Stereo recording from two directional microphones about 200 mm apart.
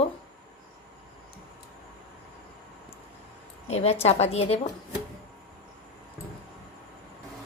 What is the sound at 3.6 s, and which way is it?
Speech, 30° left (ahead or behind).